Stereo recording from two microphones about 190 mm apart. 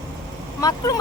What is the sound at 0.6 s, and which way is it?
Speech, 20° left (ahead or behind).